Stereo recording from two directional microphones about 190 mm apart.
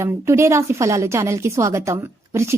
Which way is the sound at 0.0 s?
15° right (ahead or behind).